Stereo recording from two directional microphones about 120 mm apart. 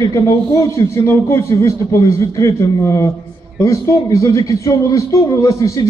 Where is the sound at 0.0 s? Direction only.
30° left (ahead or behind).